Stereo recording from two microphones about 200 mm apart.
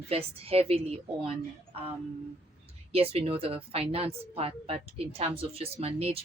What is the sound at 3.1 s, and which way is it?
A woman's voice, 30° right (ahead or behind).